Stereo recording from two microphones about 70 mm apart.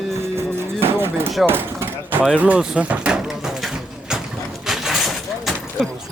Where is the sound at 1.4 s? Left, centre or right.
Right.